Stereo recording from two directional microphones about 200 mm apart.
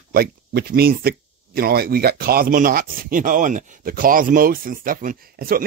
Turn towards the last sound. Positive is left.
turn(degrees=-45)  # may be behind; listen again after turning